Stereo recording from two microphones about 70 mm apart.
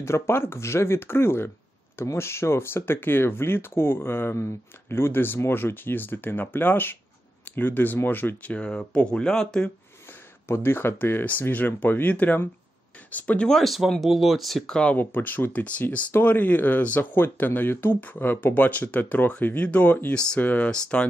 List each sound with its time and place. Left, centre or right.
0.0 s speech: left; by 9.7 s centre
10.5 s speech: left
13.5 s speech: centre
15.0 s speech: left